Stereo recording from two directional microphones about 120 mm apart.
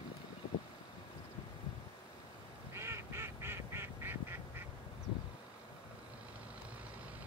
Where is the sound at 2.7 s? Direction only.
20° right (ahead or behind).